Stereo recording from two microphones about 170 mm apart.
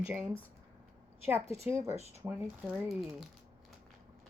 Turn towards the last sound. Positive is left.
turn(degrees=0)  # may be behind; listen again after turning